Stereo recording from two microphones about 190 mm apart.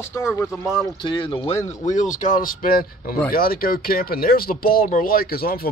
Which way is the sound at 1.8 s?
40° left (ahead or behind).